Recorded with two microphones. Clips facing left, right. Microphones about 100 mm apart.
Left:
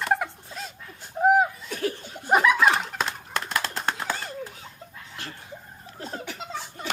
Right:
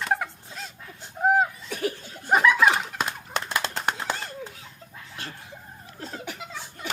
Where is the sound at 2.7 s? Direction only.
5° right (ahead or behind).